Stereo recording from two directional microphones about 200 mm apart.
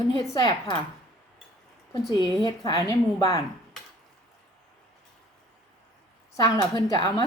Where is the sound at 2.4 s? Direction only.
20° left (ahead or behind).